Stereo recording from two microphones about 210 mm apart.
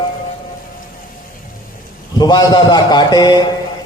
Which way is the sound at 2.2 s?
20° left (ahead or behind).